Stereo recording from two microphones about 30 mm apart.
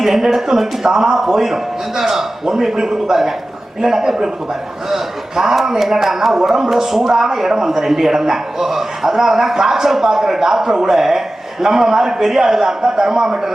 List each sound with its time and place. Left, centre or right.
0.0 s a man's voice: centre
5.4 s a man's voice: centre